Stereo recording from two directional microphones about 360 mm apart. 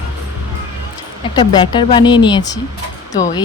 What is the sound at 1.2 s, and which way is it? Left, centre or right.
Speech, centre.